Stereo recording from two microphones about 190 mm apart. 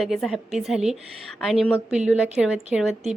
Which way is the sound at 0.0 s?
Centre (ahead or behind).